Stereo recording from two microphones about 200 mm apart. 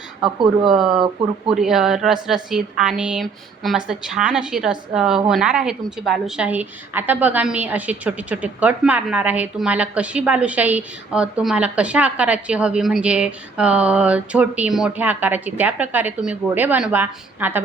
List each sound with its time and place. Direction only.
0.2 s speech: centre (ahead or behind)
0.9 s speech: 25° right (ahead or behind)
1.5 s a woman's voice: centre (ahead or behind)